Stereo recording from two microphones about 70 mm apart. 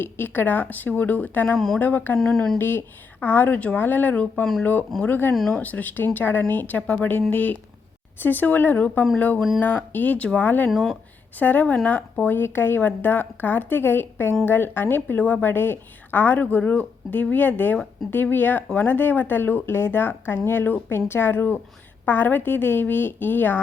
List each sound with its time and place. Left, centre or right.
0.0 s speech: left
1.5 s speech: centre
1.8 s speech: left
2.1 s speech: centre
2.6 s speech: left
5.3 s speech: centre
5.5 s speech: left
10.7 s speech: centre
11.3 s speech: left